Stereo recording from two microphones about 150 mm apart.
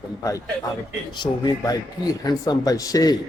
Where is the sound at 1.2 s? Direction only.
30° left (ahead or behind).